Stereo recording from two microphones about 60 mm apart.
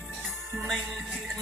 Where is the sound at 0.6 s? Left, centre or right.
Centre.